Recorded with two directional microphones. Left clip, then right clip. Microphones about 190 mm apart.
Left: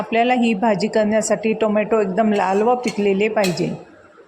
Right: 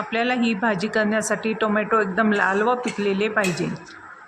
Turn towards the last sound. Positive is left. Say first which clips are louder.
# left 4 dB
turn(degrees=20)  # may be behind; listen again after turning